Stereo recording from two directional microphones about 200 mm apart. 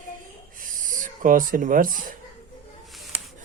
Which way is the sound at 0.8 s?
40° right (ahead or behind).